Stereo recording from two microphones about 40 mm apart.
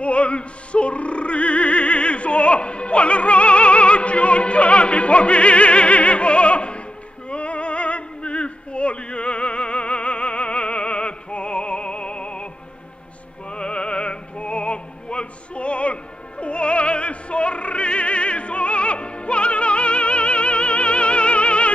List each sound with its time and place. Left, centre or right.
0.0 s a sound: left
7.2 s music: left
13.5 s music: left